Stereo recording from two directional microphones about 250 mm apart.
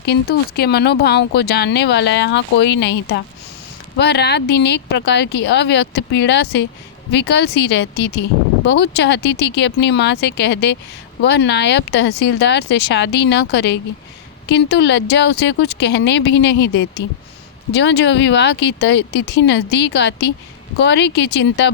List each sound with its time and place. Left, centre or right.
0.0 s speech: left